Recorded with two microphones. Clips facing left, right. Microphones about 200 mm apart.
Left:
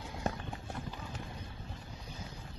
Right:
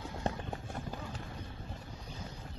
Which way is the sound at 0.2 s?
30° right (ahead or behind).